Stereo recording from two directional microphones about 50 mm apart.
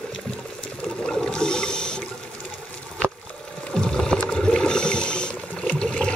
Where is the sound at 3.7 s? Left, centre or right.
Centre.